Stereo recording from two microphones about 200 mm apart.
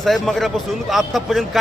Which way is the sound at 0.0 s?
Centre (ahead or behind).